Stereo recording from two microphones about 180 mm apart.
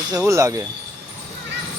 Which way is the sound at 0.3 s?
15° right (ahead or behind).